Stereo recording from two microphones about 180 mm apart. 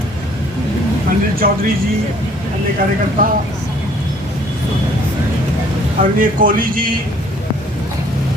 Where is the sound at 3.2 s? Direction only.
50° right (ahead or behind).